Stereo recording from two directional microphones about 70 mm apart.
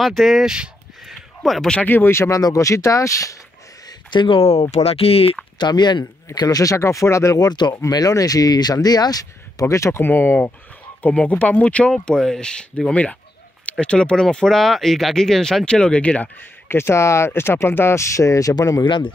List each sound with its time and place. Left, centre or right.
0.0 s speech: centre
1.8 s speech: left
2.1 s speech: left
4.1 s speech: left
5.6 s speech: left
6.3 s speech: left
7.3 s speech: left
7.9 s speech: left
10.0 s speech: left
16.6 s speech: left
18.5 s speech: left